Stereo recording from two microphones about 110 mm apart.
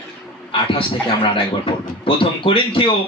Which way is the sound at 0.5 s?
55° left (ahead or behind).